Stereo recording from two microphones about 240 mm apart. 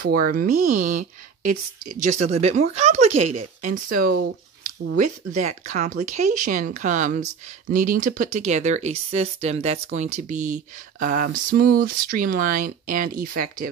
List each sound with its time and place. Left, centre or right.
0.0 s a woman's voice: right
3.7 s speech: right